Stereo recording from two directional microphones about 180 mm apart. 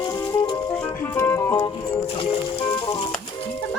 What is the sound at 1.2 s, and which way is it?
Music, 15° left (ahead or behind).